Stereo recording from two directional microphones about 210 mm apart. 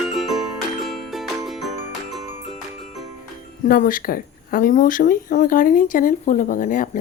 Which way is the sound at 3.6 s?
40° left (ahead or behind).